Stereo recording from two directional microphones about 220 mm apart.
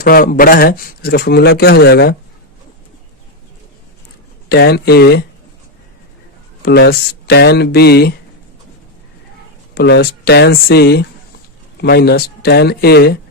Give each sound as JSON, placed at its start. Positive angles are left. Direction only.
{"t": 0.0, "sound": "speech", "side_deg": 40}
{"t": 4.4, "sound": "speech", "side_deg": 45}
{"t": 6.6, "sound": "speech", "side_deg": 45}
{"t": 9.7, "sound": "speech", "side_deg": 45}